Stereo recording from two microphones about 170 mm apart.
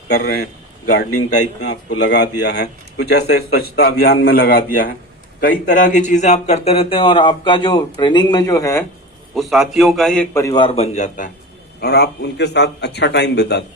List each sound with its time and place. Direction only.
0.1 s a man's voice: 70° left (ahead or behind); by 8.8 s 20° left (ahead or behind)
9.3 s a man's voice: centre (ahead or behind)
10.3 s a man's voice: 20° left (ahead or behind)
10.7 s a man's voice: 40° left (ahead or behind)
11.8 s a man's voice: 70° left (ahead or behind)